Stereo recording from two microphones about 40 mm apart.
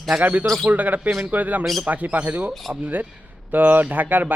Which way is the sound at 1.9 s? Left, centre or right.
Right.